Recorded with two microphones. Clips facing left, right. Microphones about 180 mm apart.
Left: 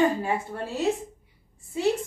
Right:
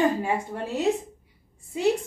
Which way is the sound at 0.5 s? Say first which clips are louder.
Right 2 dB; 20° right (ahead or behind).